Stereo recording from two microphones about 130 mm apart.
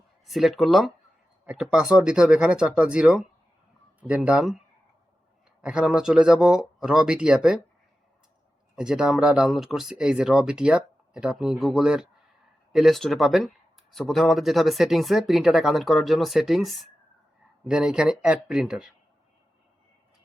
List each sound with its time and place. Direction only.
0.3 s speech: centre (ahead or behind)
5.6 s speech: 5° right (ahead or behind)
8.7 s speech: 5° right (ahead or behind)